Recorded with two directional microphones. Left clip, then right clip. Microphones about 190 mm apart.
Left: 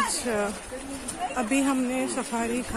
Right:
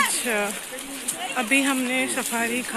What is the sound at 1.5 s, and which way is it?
Speech, 5° left (ahead or behind).